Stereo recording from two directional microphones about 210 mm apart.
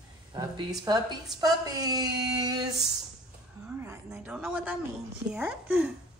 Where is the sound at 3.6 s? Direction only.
10° right (ahead or behind).